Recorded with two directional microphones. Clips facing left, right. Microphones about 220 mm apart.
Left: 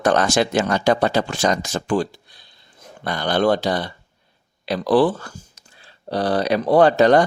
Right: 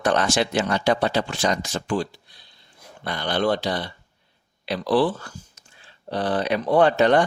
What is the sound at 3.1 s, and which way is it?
Speech, 45° left (ahead or behind).